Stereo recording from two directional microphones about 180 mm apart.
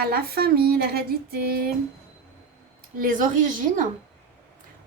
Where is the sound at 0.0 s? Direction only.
60° right (ahead or behind).